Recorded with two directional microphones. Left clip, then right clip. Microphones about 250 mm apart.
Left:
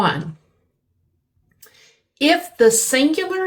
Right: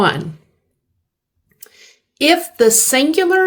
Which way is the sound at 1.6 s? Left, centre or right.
Right.